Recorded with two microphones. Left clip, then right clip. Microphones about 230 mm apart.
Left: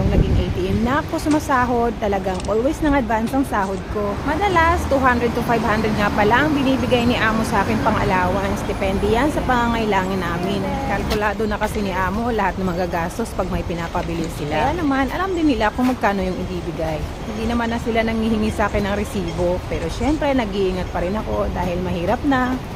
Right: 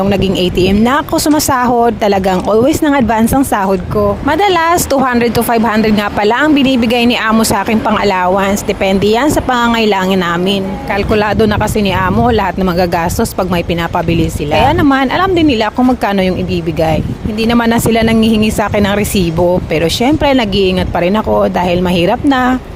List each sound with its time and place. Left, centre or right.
0.6 s speech: right
14.7 s speech: right
17.5 s speech: right